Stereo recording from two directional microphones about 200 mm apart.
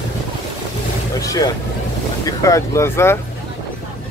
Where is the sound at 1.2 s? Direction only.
15° left (ahead or behind).